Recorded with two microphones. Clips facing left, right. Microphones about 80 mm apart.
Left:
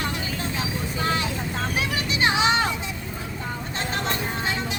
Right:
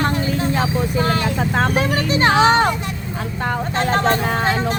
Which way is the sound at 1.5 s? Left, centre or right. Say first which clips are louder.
Right 10 dB; right.